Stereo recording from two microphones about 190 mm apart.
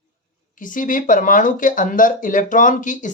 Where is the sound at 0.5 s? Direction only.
45° left (ahead or behind).